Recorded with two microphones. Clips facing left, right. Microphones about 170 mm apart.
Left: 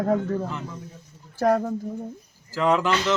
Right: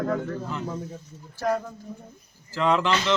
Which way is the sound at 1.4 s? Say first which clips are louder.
Left 5 dB; 50° left (ahead or behind).